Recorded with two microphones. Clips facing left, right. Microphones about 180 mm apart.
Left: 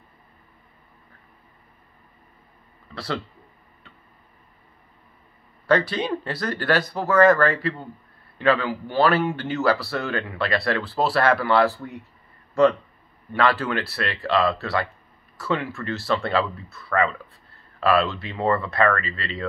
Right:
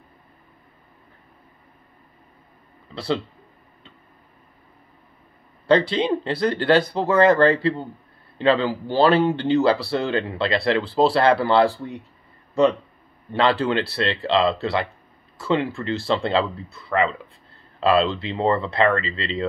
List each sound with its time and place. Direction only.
2.9 s a sound: 25° right (ahead or behind)
5.7 s speech: 25° right (ahead or behind)
13.3 s speech: 25° right (ahead or behind)